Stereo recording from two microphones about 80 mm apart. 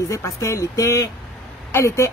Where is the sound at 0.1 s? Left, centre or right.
Left.